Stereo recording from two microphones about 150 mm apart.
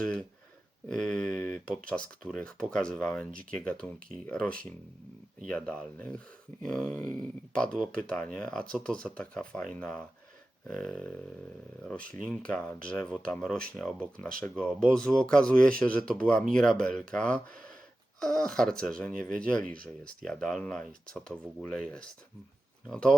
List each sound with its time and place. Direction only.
0.9 s speech: 5° left (ahead or behind)
11.9 s speech: 70° right (ahead or behind)
12.3 s speech: 5° left (ahead or behind)